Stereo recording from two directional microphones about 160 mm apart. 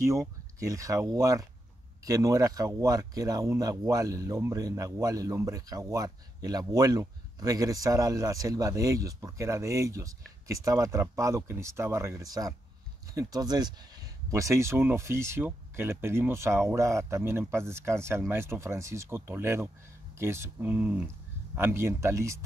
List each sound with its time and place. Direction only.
0.0 s a man's voice: 20° right (ahead or behind)